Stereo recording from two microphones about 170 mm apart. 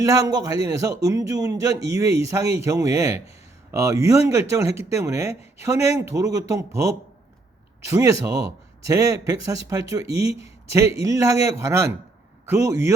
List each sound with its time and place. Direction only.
0.0 s a man's voice: 20° right (ahead or behind)